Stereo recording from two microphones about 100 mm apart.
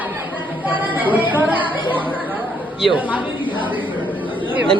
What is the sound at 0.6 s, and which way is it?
Music, 15° right (ahead or behind).